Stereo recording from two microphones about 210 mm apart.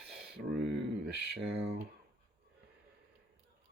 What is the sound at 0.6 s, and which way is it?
Speech, 55° right (ahead or behind).